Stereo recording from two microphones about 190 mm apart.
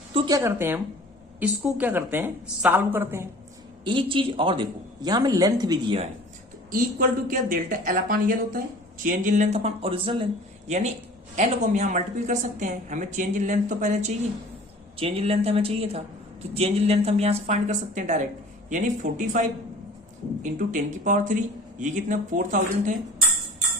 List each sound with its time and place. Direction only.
0.1 s a woman's voice: 20° right (ahead or behind)
3.8 s speech: 25° right (ahead or behind)
6.7 s a woman's voice: 45° right (ahead or behind); by 10.2 s 30° right (ahead or behind)
10.7 s a woman's voice: 40° right (ahead or behind)
14.9 s a woman's voice: 30° right (ahead or behind)